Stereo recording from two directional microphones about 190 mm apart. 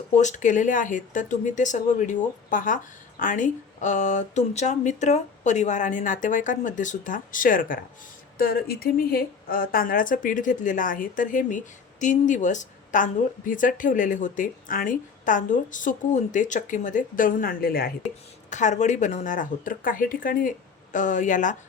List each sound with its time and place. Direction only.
0.2 s speech: 40° left (ahead or behind)
18.5 s speech: 40° left (ahead or behind)